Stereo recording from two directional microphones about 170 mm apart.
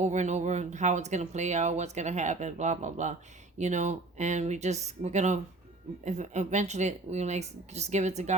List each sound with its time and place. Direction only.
0.0 s speech: 45° right (ahead or behind)